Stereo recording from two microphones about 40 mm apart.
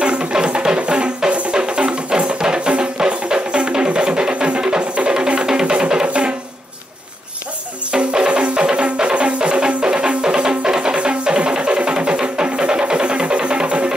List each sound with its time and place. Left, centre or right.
0.0 s music: right
7.9 s music: right